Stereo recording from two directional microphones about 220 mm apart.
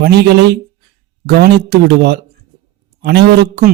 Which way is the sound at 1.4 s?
45° right (ahead or behind).